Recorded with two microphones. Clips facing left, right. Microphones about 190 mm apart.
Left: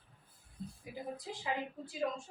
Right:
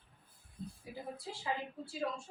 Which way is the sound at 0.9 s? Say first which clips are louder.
Left 1 dB; 15° left (ahead or behind).